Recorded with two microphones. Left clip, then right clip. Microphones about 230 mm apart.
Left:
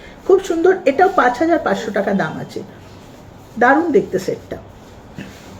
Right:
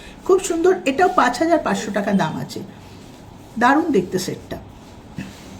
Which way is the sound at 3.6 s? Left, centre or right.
Right.